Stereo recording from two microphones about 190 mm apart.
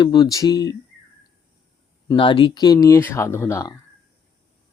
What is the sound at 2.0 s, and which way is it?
Speech, 25° left (ahead or behind).